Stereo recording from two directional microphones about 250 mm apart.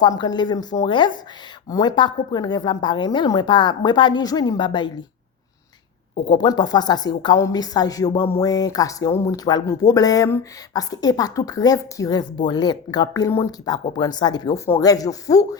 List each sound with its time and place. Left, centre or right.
0.0 s speech: centre
6.2 s speech: centre